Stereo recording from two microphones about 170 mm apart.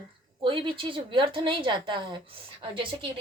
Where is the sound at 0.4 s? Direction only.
30° right (ahead or behind).